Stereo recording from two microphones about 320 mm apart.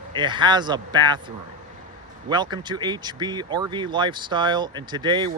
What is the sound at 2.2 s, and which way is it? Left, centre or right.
Speech, centre.